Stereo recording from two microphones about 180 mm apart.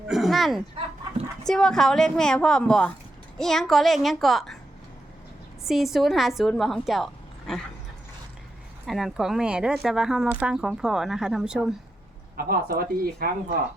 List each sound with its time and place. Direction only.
0.1 s a sound: centre (ahead or behind)
1.5 s speech: 5° left (ahead or behind)
5.6 s speech: centre (ahead or behind)
8.9 s speech: centre (ahead or behind)
12.4 s speech: 55° right (ahead or behind)